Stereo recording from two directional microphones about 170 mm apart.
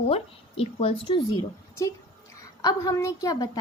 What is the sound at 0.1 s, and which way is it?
Speech, 35° left (ahead or behind).